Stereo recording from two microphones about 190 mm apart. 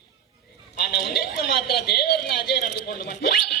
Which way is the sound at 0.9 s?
55° left (ahead or behind).